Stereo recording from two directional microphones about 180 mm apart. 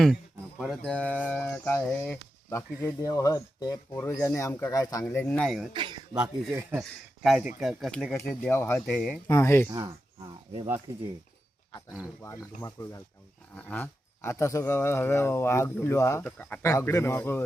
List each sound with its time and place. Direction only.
0.6 s speech: centre (ahead or behind); by 5.0 s 20° left (ahead or behind)
5.0 s speech: 10° left (ahead or behind)
5.7 s speech: 25° right (ahead or behind)
6.1 s speech: 10° right (ahead or behind)
7.2 s speech: centre (ahead or behind)
9.3 s speech: 15° left (ahead or behind)
9.6 s speech: 20° right (ahead or behind)
12.2 s speech: 15° left (ahead or behind)